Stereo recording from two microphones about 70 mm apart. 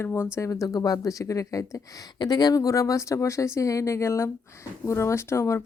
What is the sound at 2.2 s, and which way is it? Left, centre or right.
Speech, left.